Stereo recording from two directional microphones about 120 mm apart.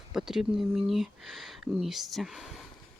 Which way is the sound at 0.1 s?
5° right (ahead or behind).